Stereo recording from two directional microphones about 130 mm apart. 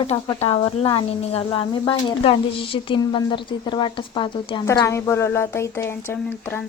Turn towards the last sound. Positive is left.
turn(degrees=15)  # may be behind; listen again after turning